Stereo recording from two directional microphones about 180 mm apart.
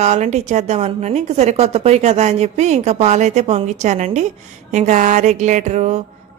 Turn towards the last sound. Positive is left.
turn(degrees=-40)  # may be behind; listen again after turning